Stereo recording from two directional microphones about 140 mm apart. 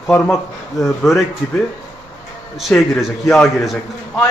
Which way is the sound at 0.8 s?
Centre (ahead or behind).